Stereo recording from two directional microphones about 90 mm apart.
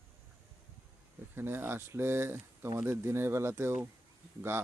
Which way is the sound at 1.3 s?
25° right (ahead or behind).